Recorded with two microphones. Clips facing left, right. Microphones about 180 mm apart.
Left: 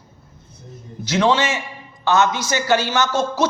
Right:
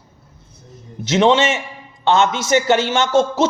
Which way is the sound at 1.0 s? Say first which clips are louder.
Right 4 dB; 25° right (ahead or behind).